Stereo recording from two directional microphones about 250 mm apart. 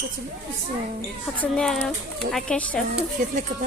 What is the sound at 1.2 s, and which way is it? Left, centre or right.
A child's voice, centre.